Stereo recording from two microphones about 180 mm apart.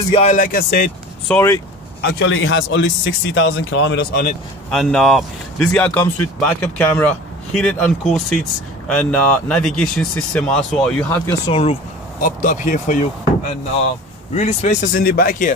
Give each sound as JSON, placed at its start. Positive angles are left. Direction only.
{"t": 0.1, "sound": "speech", "side_deg": 40}
{"t": 0.5, "sound": "speech", "side_deg": 55}
{"t": 1.3, "sound": "speech", "side_deg": 15}
{"t": 2.0, "sound": "a man's voice", "side_deg": 70}
{"t": 4.6, "sound": "speech", "side_deg": 0}
{"t": 11.4, "sound": "speech", "side_deg": 30}
{"t": 12.2, "sound": "speech", "side_deg": 45}
{"t": 14.3, "sound": "speech", "side_deg": 40}